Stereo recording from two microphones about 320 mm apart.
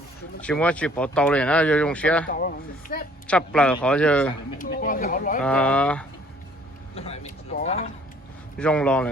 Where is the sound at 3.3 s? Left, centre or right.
Centre.